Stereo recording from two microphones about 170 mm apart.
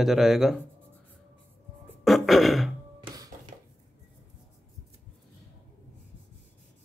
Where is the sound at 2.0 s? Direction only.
Centre (ahead or behind).